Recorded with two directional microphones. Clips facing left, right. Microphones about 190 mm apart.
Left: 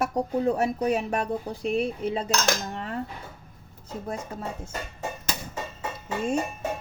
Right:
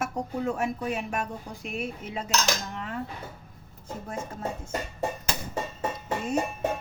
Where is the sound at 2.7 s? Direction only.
35° left (ahead or behind).